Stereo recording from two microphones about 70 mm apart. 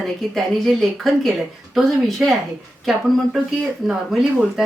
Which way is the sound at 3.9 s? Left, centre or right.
Centre.